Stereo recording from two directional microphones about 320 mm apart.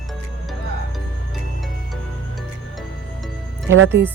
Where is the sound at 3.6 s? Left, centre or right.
Right.